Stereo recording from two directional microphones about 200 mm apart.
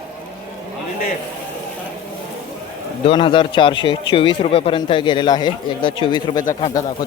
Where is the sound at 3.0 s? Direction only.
25° left (ahead or behind).